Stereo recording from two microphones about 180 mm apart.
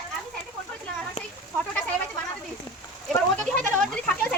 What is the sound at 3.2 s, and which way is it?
Goat, 10° left (ahead or behind).